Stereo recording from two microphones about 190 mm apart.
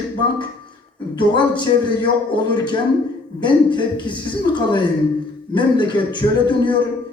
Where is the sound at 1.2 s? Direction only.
25° left (ahead or behind).